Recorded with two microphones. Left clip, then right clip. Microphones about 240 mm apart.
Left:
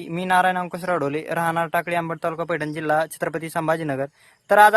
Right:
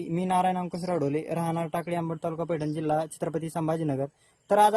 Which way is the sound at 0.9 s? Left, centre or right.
Centre.